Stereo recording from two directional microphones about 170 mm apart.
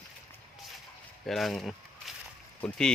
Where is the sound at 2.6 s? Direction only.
5° left (ahead or behind).